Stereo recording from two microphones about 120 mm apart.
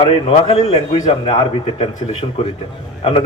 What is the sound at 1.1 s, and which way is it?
A man's voice, 50° left (ahead or behind).